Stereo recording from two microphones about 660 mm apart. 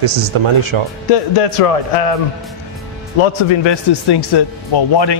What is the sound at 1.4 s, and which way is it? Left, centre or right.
Speech, left.